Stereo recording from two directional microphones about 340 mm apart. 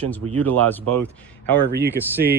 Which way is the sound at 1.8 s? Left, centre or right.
Centre.